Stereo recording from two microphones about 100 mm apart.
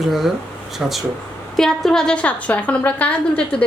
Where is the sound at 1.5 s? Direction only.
5° left (ahead or behind).